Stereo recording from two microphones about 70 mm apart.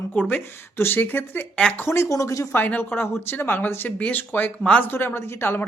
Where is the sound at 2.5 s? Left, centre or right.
Left.